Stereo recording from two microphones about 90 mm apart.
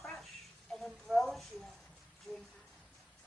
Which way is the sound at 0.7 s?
5° left (ahead or behind).